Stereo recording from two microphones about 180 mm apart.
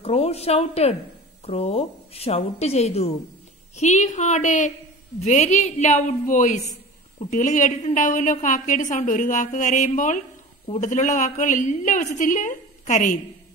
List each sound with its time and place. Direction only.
0.0 s a woman's voice: 35° left (ahead or behind)